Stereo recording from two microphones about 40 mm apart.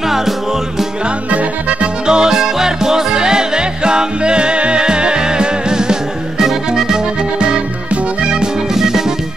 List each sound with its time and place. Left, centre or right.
1.3 s music: right
2.0 s music: centre